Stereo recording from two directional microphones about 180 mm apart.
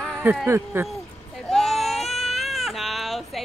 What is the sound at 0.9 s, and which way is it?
Baby cry, centre (ahead or behind).